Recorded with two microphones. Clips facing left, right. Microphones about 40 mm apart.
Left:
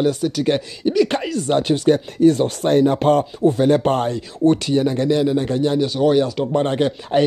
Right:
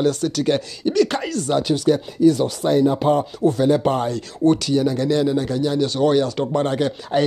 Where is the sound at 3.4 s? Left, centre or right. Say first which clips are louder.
Left 2 dB; left.